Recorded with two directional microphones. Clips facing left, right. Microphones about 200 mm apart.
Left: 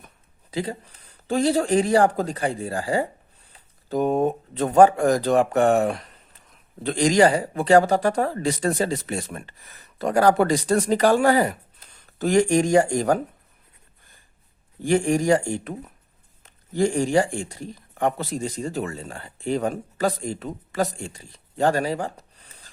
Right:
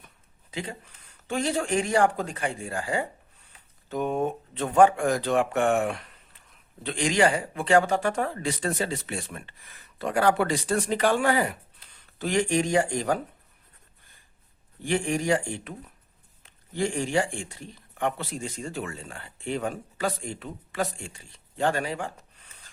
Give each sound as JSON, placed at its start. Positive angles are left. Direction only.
{"t": 0.5, "sound": "speech", "side_deg": 35}
{"t": 14.8, "sound": "speech", "side_deg": 40}